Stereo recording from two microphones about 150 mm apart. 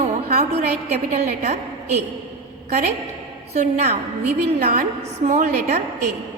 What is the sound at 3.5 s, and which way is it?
A woman's voice, 50° right (ahead or behind).